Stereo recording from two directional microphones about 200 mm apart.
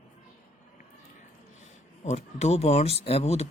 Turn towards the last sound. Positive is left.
turn(degrees=30)  # may be behind; listen again after turning